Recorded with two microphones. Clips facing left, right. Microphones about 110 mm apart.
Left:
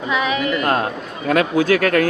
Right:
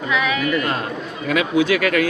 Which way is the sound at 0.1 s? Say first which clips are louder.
Left 1 dB; 25° left (ahead or behind).